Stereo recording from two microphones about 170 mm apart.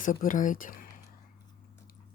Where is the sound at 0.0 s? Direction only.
50° left (ahead or behind).